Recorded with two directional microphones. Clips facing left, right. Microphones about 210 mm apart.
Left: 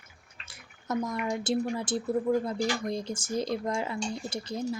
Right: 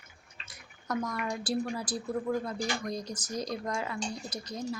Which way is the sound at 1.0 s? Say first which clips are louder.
Left 4 dB; 20° left (ahead or behind).